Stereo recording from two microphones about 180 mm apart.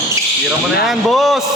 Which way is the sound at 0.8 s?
Centre (ahead or behind).